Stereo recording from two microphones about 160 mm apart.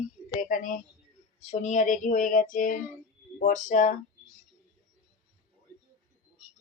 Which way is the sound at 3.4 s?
50° left (ahead or behind).